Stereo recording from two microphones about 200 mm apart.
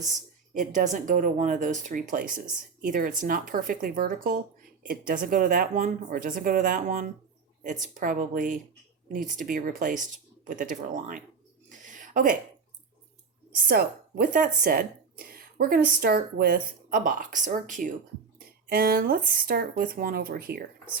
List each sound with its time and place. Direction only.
0.0 s speech: 40° right (ahead or behind)
11.7 s a sound: 40° right (ahead or behind)
13.6 s a woman's voice: 50° right (ahead or behind)